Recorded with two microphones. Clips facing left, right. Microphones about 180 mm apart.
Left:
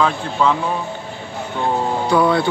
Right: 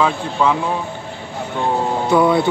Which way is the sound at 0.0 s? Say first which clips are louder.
Even; 5° right (ahead or behind).